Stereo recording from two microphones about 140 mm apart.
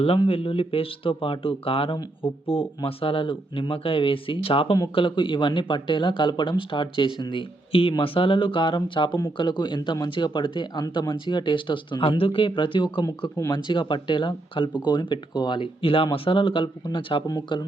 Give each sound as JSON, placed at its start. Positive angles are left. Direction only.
{"t": 0.0, "sound": "speech", "side_deg": 40}
{"t": 17.2, "sound": "speech", "side_deg": 25}